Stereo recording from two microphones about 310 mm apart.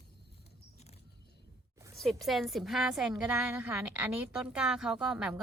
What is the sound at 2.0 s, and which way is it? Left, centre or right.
A woman's voice, centre.